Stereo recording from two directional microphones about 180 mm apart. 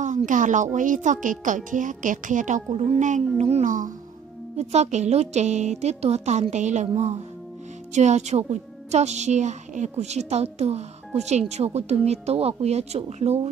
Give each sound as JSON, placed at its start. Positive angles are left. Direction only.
{"t": 0.0, "sound": "a woman's voice", "side_deg": -45}
{"t": 7.9, "sound": "a woman's voice", "side_deg": -40}